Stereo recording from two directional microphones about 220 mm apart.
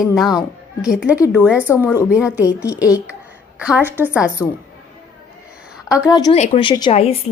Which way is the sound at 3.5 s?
5° right (ahead or behind).